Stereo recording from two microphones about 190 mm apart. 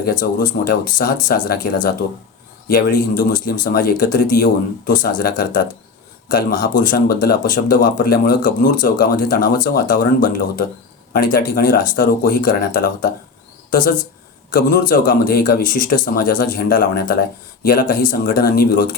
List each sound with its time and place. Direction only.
0.0 s speech: 45° left (ahead or behind)